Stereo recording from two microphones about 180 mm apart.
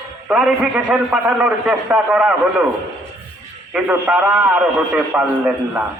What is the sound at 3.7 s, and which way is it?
A man's voice, 5° right (ahead or behind).